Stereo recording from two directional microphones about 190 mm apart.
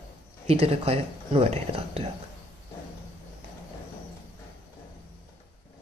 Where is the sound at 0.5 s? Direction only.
30° right (ahead or behind).